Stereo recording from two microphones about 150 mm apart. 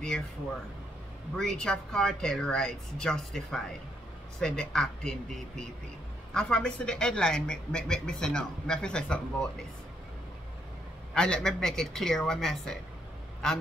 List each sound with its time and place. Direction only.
1.3 s speech: 5° left (ahead or behind)
11.1 s speech: 5° left (ahead or behind)